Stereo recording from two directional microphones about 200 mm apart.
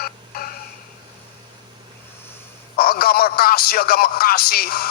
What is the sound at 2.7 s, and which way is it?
A man's voice, 50° left (ahead or behind).